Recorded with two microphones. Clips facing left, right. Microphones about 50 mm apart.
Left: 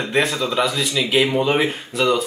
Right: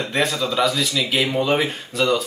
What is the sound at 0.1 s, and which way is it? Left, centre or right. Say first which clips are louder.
Speech: left 2 dB; centre.